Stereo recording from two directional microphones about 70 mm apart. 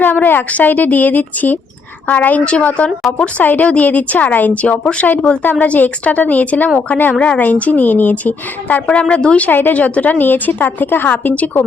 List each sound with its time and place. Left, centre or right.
0.0 s a woman's voice: left